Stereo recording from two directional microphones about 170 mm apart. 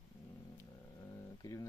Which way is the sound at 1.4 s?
20° left (ahead or behind).